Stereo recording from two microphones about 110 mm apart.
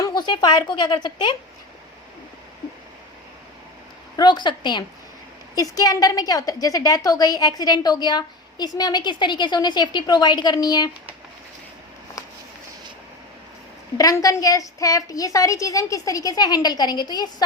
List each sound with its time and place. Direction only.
0.0 s speech: 40° left (ahead or behind)
4.2 s a woman's voice: 45° left (ahead or behind)
14.0 s a woman's voice: 30° left (ahead or behind)